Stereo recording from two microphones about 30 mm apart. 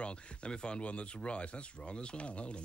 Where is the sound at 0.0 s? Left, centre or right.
Left.